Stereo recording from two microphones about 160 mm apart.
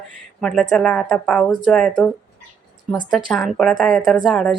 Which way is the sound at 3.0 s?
Centre (ahead or behind).